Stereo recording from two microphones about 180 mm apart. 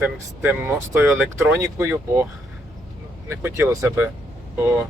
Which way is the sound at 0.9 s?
10° right (ahead or behind).